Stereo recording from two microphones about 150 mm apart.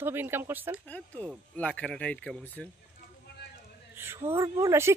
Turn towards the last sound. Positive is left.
turn(degrees=-20)  # may be behind; listen again after turning